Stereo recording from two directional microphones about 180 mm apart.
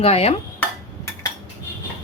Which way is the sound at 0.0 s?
35° left (ahead or behind).